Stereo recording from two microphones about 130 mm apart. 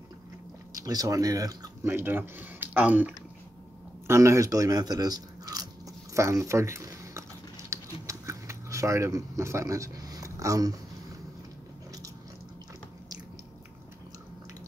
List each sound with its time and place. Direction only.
0.7 s speech: 25° right (ahead or behind)
6.1 s typing: 25° right (ahead or behind)